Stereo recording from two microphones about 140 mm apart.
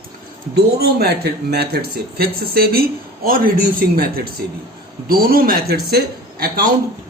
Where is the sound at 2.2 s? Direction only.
90° right.